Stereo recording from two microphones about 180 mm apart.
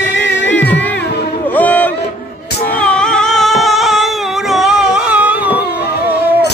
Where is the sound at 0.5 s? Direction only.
10° left (ahead or behind).